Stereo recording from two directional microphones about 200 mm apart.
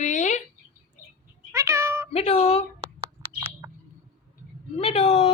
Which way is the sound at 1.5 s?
15° right (ahead or behind).